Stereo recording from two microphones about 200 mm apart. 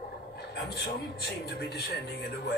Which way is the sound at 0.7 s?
55° left (ahead or behind).